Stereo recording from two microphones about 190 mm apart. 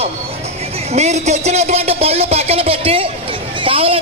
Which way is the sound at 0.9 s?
35° right (ahead or behind).